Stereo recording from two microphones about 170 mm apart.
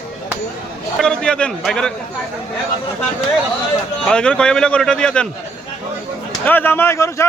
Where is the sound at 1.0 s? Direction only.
5° left (ahead or behind).